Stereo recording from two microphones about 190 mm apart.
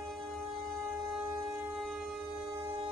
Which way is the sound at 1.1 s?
5° right (ahead or behind).